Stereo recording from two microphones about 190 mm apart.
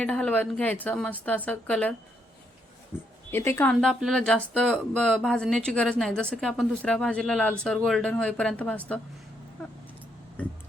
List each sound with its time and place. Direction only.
0.0 s a woman's voice: 5° left (ahead or behind)
2.9 s a sound: 5° right (ahead or behind)
3.3 s speech: 10° left (ahead or behind)